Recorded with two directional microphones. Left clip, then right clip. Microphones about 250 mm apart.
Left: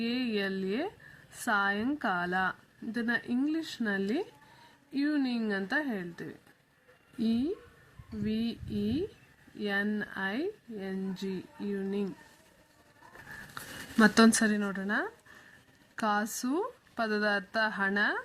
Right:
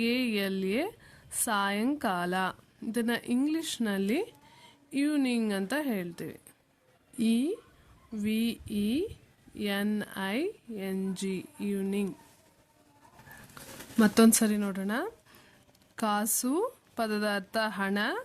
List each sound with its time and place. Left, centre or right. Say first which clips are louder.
0.0 s a woman's voice: right 3 dB; right
14.0 s speech: even; right